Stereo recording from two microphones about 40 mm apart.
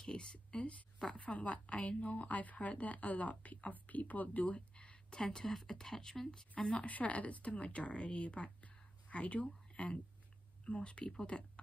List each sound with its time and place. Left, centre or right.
0.0 s a sound: left
1.1 s a woman's voice: left
4.6 s speech: left
6.7 s a woman's voice: left